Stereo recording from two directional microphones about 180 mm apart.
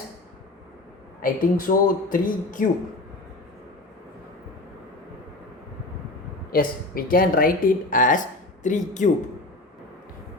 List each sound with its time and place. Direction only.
1.2 s speech: 50° left (ahead or behind)
6.5 s speech: 55° left (ahead or behind)